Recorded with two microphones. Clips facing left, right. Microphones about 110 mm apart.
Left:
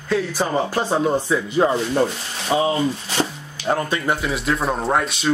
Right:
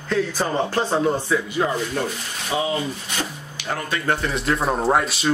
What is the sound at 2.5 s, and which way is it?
Speech, 30° left (ahead or behind).